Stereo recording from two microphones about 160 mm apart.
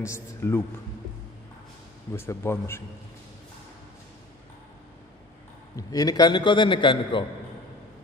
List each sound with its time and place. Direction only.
0.0 s a man's voice: 15° left (ahead or behind)
2.1 s a man's voice: 15° left (ahead or behind)
5.8 s a man's voice: 25° left (ahead or behind)